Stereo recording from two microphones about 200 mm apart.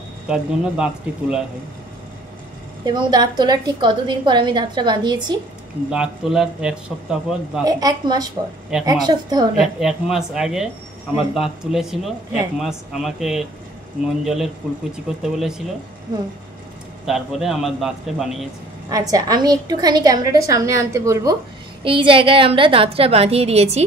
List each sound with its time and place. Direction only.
0.3 s speech: 5° right (ahead or behind)
2.8 s a woman's voice: 20° right (ahead or behind)
5.9 s speech: 5° right (ahead or behind)
7.6 s a woman's voice: 20° right (ahead or behind)
9.6 s speech: 5° right (ahead or behind)
17.0 s speech: 5° right (ahead or behind)
18.9 s a woman's voice: 15° right (ahead or behind)